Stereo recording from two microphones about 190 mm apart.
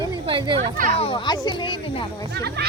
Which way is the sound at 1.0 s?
25° left (ahead or behind).